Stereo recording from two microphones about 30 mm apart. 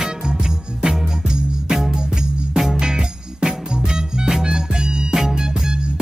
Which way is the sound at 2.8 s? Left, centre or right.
Right.